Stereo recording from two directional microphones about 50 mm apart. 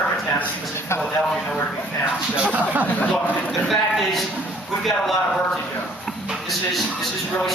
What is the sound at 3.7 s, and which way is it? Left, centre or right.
A man's voice, centre.